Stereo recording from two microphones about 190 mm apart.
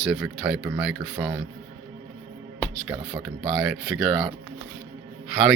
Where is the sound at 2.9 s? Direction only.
20° right (ahead or behind).